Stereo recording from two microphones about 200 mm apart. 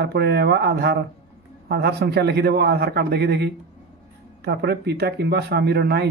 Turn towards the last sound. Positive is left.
turn(degrees=-55)  # may be behind; listen again after turning